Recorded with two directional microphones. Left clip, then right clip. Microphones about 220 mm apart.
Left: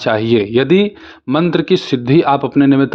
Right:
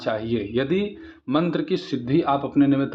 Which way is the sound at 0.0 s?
45° left (ahead or behind).